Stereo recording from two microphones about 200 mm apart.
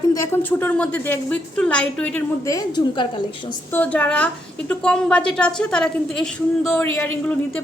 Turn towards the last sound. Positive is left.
turn(degrees=5)  # may be behind; listen again after turning